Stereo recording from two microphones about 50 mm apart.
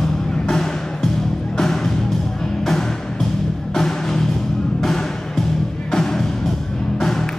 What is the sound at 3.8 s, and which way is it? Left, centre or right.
Music, centre.